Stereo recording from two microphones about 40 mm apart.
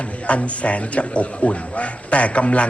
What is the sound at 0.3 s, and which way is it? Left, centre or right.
Speech, left.